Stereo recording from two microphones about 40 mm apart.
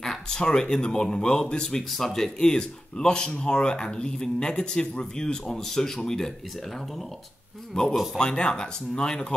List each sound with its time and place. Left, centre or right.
0.0 s speech: centre
1.8 s speech: centre
7.9 s speech: centre
8.2 s speech: left